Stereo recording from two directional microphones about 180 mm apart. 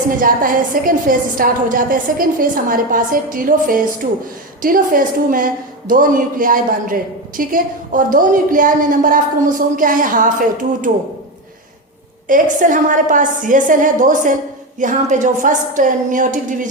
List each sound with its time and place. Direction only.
0.2 s a woman's voice: 50° right (ahead or behind)
12.3 s a woman's voice: 45° right (ahead or behind)